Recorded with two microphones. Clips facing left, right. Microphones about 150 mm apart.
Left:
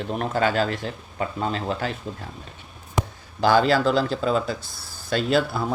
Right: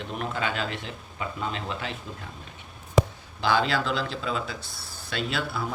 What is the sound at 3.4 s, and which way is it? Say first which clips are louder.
Speech: left 6 dB; 40° left (ahead or behind).